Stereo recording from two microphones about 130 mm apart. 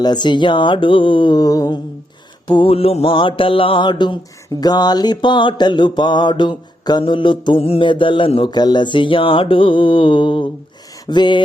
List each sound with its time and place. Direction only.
0.0 s mantra: 35° left (ahead or behind)
2.5 s mantra: 45° left (ahead or behind)
11.0 s a sound: 35° left (ahead or behind)